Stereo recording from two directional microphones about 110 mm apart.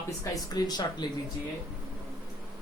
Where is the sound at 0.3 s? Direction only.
35° left (ahead or behind).